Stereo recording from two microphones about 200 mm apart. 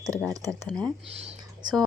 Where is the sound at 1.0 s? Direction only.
30° right (ahead or behind).